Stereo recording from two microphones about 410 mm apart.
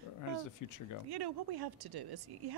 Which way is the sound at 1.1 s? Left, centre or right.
Right.